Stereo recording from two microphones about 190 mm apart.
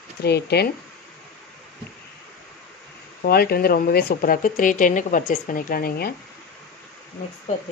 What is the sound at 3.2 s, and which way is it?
Speech, 55° left (ahead or behind).